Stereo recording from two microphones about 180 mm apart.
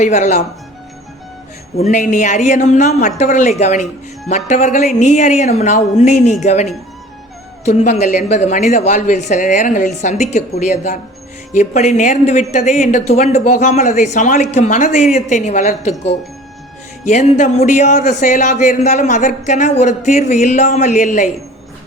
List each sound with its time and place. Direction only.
0.0 s speech: 40° left (ahead or behind)
1.7 s a woman's voice: 40° left (ahead or behind)